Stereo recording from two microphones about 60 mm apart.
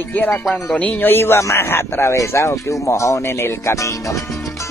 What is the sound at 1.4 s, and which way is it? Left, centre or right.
Speech, left.